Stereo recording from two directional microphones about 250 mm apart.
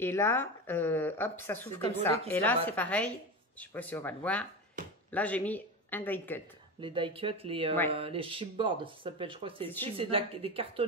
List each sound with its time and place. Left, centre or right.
0.0 s speech: centre
6.8 s speech: right